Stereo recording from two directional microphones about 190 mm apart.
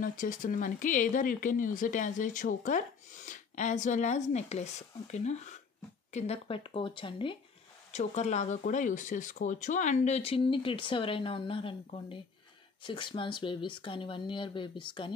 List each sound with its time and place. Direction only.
0.0 s speech: 45° left (ahead or behind); by 7.3 s 25° left (ahead or behind)
7.9 s speech: 35° left (ahead or behind)